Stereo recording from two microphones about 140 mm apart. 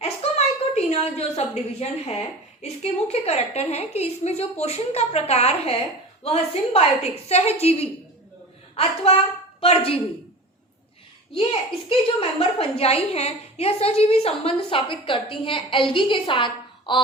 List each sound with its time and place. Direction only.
0.0 s a woman's voice: 50° left (ahead or behind)
11.9 s a woman's voice: 45° left (ahead or behind)